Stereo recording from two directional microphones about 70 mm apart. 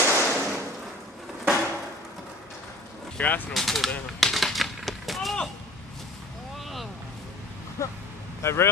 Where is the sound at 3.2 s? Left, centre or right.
Left.